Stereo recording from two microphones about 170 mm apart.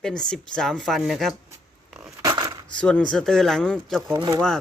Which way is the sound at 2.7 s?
5° left (ahead or behind).